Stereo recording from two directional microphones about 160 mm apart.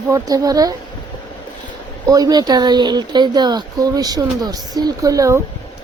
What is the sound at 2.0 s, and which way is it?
Speech, 20° right (ahead or behind).